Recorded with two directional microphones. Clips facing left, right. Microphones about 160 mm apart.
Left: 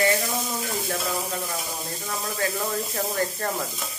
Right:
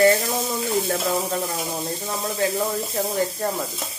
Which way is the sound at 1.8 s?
25° right (ahead or behind).